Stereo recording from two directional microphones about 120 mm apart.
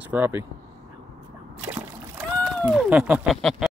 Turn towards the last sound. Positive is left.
turn(degrees=0)  # may be behind; listen again after turning